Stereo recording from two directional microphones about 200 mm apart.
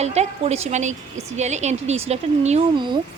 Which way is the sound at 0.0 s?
30° right (ahead or behind).